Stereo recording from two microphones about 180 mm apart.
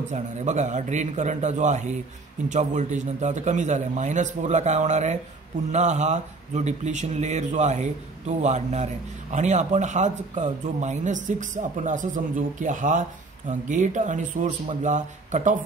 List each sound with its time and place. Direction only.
0.1 s speech: 40° right (ahead or behind)